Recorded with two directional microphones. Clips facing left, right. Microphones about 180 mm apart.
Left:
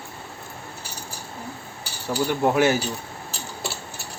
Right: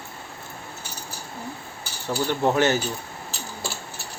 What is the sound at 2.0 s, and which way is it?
Speech, 10° left (ahead or behind).